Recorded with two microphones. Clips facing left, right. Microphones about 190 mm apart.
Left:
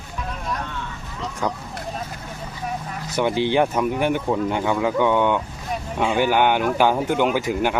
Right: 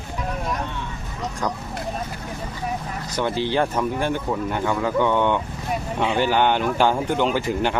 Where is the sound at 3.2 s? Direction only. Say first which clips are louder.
Left 3 dB; 15° left (ahead or behind).